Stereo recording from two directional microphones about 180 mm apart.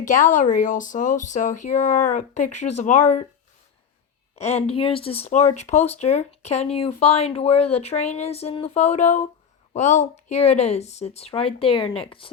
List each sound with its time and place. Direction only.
0.0 s speech: 45° left (ahead or behind)
4.4 s speech: 35° left (ahead or behind)